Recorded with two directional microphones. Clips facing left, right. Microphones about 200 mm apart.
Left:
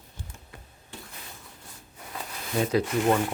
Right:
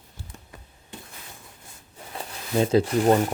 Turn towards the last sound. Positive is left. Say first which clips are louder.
# right 4 dB
turn(degrees=-35)  # may be behind; listen again after turning